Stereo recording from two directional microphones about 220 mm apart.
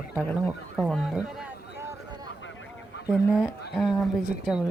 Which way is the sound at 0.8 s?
Centre (ahead or behind).